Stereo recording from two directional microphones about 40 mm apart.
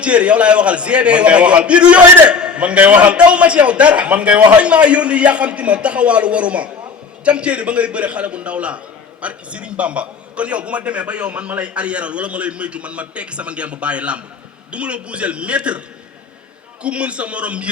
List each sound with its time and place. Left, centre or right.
0.0 s a man's voice: right
16.8 s a man's voice: right